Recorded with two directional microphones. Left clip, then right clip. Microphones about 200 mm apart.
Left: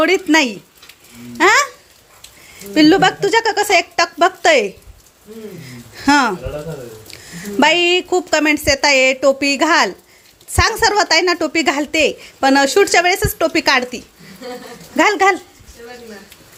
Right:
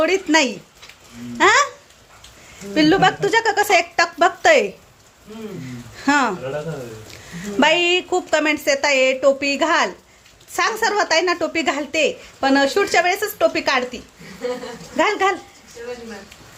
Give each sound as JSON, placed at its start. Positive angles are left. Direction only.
{"t": 0.0, "sound": "a woman's voice", "side_deg": 20}
{"t": 2.7, "sound": "a woman's voice", "side_deg": 20}
{"t": 6.0, "sound": "speech", "side_deg": 20}
{"t": 7.6, "sound": "a woman's voice", "side_deg": 15}